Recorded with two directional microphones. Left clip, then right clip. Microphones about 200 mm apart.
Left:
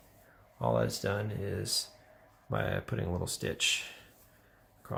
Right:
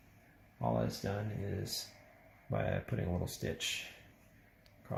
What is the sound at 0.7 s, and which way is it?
Speech, 30° left (ahead or behind).